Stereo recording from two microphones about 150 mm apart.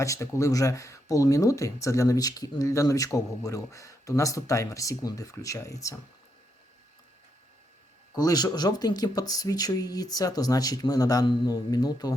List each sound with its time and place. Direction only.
0.0 s speech: 20° left (ahead or behind)
8.1 s speech: 25° left (ahead or behind)